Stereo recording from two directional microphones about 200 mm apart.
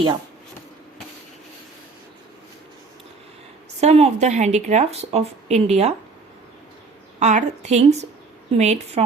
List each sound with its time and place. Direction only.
3.8 s speech: 30° right (ahead or behind)
7.2 s speech: 35° right (ahead or behind)